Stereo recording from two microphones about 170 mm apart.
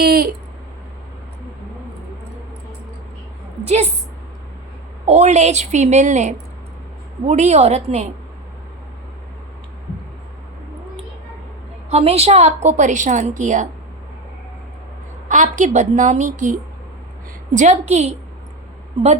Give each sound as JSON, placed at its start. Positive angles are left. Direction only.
{"t": 0.0, "sound": "a sound", "side_deg": -60}
{"t": 3.6, "sound": "a woman's voice", "side_deg": -40}
{"t": 5.0, "sound": "a woman's voice", "side_deg": -40}
{"t": 11.9, "sound": "a woman's voice", "side_deg": -35}
{"t": 15.3, "sound": "a woman's voice", "side_deg": -45}